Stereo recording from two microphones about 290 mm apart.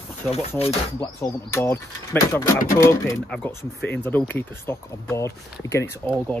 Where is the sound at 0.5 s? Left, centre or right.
Centre.